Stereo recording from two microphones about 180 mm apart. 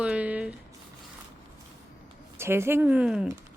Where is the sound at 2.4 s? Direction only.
15° right (ahead or behind).